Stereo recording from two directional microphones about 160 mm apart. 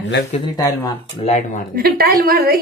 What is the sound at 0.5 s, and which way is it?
Speech, 20° left (ahead or behind).